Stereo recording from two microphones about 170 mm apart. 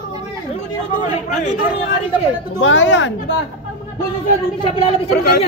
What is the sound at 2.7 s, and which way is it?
Speech, 90° left.